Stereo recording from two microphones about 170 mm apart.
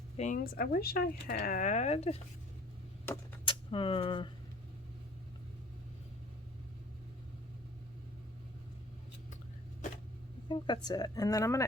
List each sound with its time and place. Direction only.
0.3 s speech: 60° left (ahead or behind); by 2.2 s 35° left (ahead or behind)
3.4 s speech: 30° left (ahead or behind)
10.5 s speech: 25° left (ahead or behind)